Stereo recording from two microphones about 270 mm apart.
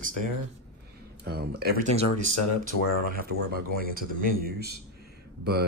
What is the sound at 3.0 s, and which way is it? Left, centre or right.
Speech, right.